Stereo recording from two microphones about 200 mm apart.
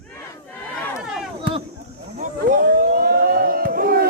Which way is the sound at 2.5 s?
45° right (ahead or behind).